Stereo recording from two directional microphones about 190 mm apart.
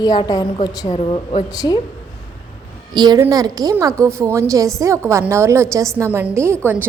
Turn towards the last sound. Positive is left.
turn(degrees=-15)  # may be behind; listen again after turning